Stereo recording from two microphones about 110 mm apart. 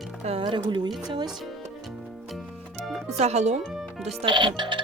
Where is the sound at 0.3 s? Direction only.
50° right (ahead or behind).